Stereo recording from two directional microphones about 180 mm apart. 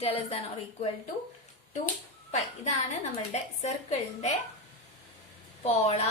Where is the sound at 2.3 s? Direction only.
40° left (ahead or behind).